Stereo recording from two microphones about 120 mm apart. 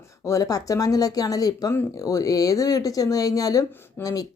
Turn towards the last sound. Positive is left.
turn(degrees=30)  # may be behind; listen again after turning